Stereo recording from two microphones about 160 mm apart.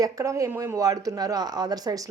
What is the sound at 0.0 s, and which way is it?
Speech, 20° right (ahead or behind).